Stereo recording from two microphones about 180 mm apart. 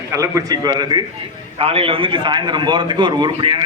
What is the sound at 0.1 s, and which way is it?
A man's voice, 20° right (ahead or behind).